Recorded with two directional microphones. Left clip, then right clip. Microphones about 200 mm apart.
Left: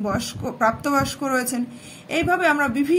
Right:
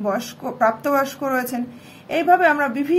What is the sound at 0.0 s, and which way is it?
A woman's voice, 20° left (ahead or behind).